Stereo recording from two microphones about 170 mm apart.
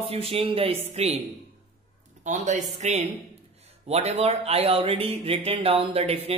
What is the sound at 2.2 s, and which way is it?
Speech, 45° right (ahead or behind).